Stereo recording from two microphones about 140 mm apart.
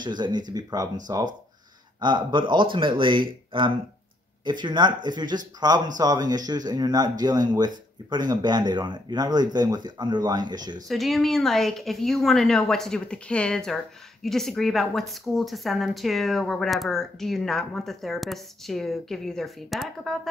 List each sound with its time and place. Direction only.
0.0 s speech: 30° right (ahead or behind)
10.9 s speech: centre (ahead or behind)